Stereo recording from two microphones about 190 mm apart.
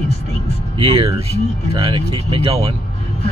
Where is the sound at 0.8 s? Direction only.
30° right (ahead or behind).